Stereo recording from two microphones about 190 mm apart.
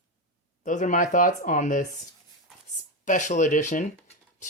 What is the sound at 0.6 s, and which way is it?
Speech, 40° left (ahead or behind).